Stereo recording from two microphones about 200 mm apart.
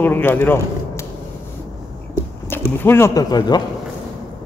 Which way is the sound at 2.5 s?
10° left (ahead or behind).